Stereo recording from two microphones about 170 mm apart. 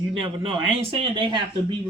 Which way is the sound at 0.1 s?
30° right (ahead or behind).